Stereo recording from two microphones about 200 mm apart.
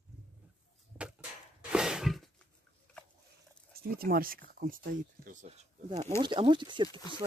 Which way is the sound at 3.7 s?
50° right (ahead or behind).